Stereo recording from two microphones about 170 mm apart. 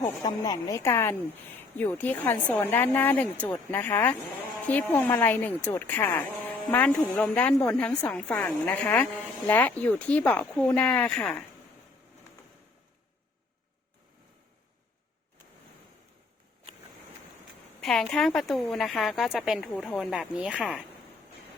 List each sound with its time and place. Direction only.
0.2 s a woman's voice: 20° left (ahead or behind); by 11.4 s 5° left (ahead or behind)
17.7 s a woman's voice: 5° left (ahead or behind)